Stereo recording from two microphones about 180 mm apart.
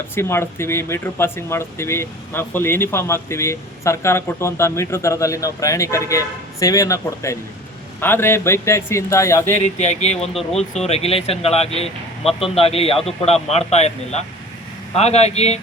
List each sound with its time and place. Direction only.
0.2 s speech: 15° left (ahead or behind)
9.6 s speech: 40° left (ahead or behind)
10.5 s speech: 5° left (ahead or behind)
10.8 s speech: 35° left (ahead or behind)